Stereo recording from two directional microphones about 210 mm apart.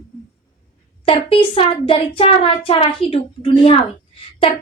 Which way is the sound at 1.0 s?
25° left (ahead or behind).